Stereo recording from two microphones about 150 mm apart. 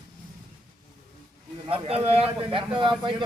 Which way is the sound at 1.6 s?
40° right (ahead or behind).